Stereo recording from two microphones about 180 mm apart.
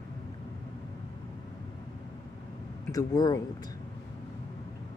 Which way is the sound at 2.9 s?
20° left (ahead or behind).